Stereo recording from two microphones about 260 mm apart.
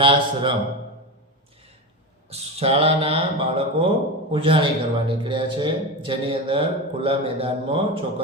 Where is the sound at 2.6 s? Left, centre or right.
Right.